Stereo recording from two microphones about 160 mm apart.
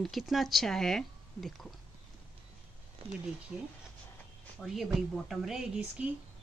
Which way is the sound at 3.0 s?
35° right (ahead or behind).